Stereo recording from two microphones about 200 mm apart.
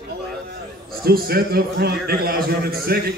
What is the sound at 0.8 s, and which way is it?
A man's voice, 50° right (ahead or behind).